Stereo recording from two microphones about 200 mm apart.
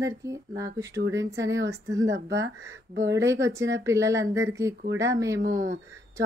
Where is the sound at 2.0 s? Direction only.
60° right (ahead or behind).